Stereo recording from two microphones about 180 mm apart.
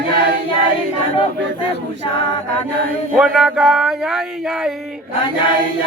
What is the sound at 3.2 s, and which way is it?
Speech, 5° right (ahead or behind).